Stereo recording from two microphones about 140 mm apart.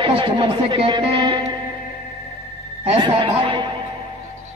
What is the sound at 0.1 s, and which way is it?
A man's voice, 35° right (ahead or behind).